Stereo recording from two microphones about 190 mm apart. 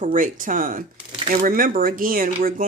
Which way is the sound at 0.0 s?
45° right (ahead or behind).